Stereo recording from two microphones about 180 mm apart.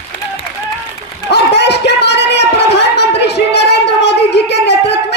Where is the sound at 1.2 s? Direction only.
70° left (ahead or behind).